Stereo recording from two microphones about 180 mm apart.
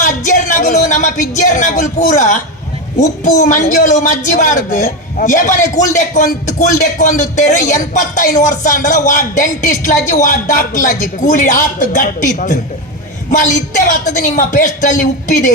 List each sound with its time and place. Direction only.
0.0 s a woman's voice: 45° left (ahead or behind)